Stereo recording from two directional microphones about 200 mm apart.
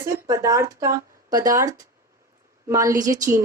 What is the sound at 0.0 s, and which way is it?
Speech, 15° right (ahead or behind).